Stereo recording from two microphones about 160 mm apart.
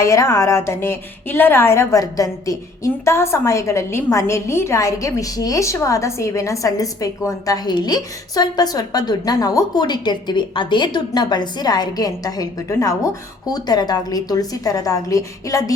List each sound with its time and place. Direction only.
0.0 s a woman's voice: 20° left (ahead or behind)